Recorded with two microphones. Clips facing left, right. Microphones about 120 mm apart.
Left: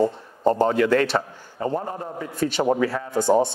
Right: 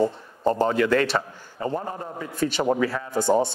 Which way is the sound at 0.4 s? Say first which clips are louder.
Left 2 dB; 25° left (ahead or behind).